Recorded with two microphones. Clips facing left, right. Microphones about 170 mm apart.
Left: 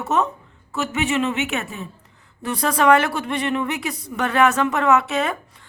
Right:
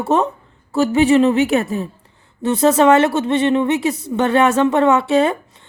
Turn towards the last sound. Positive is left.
turn(degrees=-30)  # may be behind; listen again after turning